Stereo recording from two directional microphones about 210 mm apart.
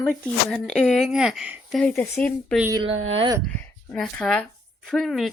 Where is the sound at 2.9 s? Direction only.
75° right (ahead or behind).